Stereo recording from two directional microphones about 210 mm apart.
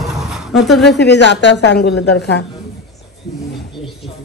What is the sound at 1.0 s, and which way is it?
A woman's voice, 55° left (ahead or behind).